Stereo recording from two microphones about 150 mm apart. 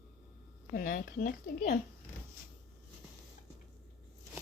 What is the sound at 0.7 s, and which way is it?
Speech, 65° left (ahead or behind).